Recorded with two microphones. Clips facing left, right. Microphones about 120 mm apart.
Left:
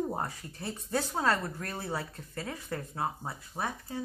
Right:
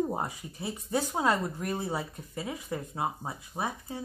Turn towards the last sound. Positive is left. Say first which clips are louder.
# right 1 dB
turn(degrees=-15)  # may be behind; listen again after turning